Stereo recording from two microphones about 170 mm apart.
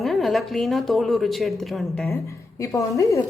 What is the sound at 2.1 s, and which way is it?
A woman's voice, 15° left (ahead or behind).